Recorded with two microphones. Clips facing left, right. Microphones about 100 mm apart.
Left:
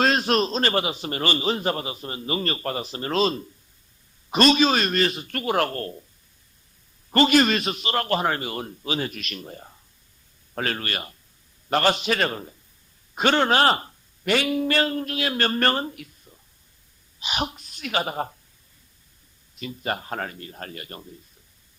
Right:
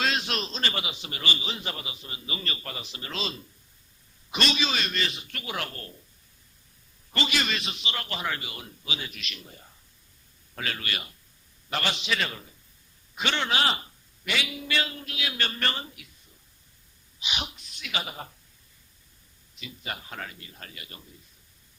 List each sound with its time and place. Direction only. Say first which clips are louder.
0.0 s a man's voice: left 9 dB; 40° left (ahead or behind)
7.1 s a man's voice: left 11 dB; 45° left (ahead or behind)
17.2 s a woman's voice: left 7 dB; 45° left (ahead or behind)
19.5 s a man's voice: left 9 dB; 45° left (ahead or behind)